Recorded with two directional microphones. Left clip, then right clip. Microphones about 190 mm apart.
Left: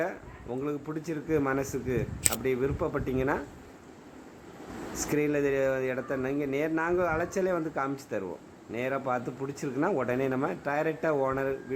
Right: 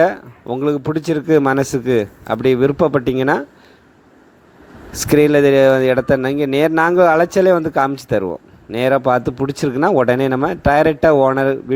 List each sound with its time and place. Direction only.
0.0 s speech: 45° right (ahead or behind)
4.9 s speech: 50° right (ahead or behind)